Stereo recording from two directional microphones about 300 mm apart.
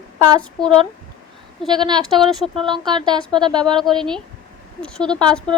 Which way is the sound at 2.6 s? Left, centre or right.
Centre.